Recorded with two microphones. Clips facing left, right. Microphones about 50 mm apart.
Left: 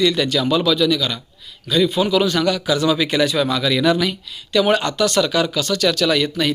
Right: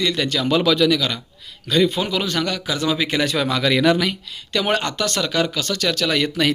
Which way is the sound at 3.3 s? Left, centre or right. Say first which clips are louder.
Left 1 dB; right.